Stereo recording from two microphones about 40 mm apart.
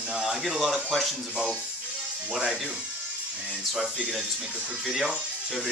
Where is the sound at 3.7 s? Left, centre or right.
Right.